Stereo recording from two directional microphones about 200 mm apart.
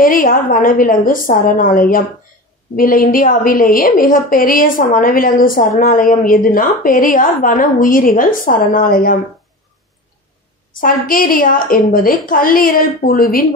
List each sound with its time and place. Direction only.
0.0 s a woman's voice: 45° left (ahead or behind)
10.8 s a woman's voice: 45° left (ahead or behind)